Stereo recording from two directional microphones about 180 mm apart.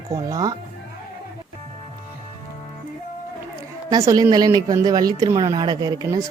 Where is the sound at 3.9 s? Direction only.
20° right (ahead or behind).